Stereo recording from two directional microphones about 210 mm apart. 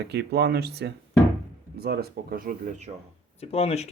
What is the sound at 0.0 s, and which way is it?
Speech, 50° right (ahead or behind).